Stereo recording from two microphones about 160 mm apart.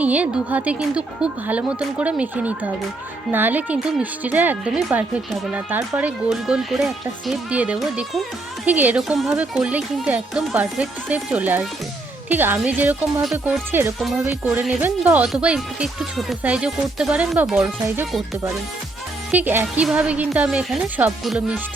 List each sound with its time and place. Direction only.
0.0 s speech: 10° right (ahead or behind)
13.7 s speech: 15° right (ahead or behind)
17.8 s speech: 15° right (ahead or behind)
19.3 s speech: 10° right (ahead or behind)